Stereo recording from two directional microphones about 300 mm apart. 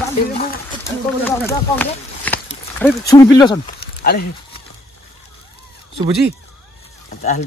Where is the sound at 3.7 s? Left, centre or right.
Left.